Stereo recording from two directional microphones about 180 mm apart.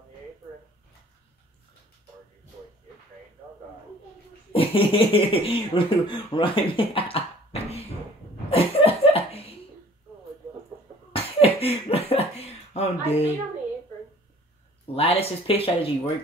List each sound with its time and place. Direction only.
4.5 s speech: 30° left (ahead or behind)
8.5 s laughter: 30° left (ahead or behind)
11.1 s a sound: 30° left (ahead or behind)
15.0 s speech: 30° left (ahead or behind)